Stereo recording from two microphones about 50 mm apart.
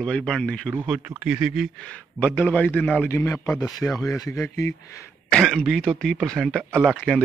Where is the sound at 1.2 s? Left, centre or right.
Centre.